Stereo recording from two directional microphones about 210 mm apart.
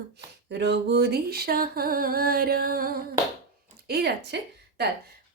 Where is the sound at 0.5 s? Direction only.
55° right (ahead or behind).